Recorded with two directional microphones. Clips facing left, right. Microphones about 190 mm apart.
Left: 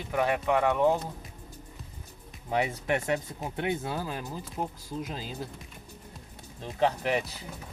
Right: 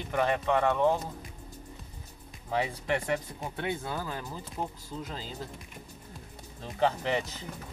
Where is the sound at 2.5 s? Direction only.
20° left (ahead or behind).